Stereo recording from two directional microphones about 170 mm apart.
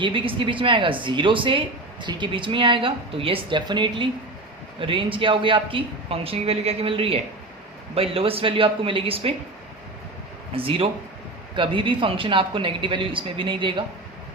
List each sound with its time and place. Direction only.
0.0 s speech: 30° right (ahead or behind)
10.5 s speech: 35° right (ahead or behind)